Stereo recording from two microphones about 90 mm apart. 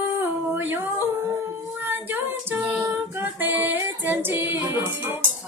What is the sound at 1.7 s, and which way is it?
Child singing, 20° right (ahead or behind).